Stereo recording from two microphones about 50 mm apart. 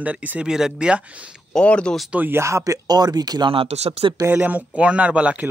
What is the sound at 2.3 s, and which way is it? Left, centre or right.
Speech, right.